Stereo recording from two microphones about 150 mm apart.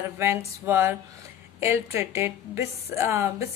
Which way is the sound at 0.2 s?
15° right (ahead or behind).